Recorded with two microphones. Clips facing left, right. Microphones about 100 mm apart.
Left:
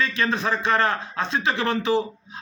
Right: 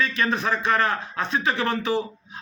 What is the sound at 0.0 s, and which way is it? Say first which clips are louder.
Speech: even; 30° left (ahead or behind).